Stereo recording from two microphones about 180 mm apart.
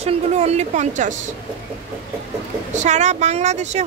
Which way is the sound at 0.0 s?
35° right (ahead or behind).